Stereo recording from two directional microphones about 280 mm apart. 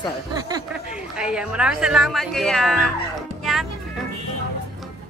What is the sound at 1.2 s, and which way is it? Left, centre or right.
Speech, centre.